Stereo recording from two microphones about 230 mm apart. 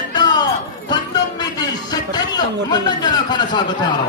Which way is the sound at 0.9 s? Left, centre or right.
Centre.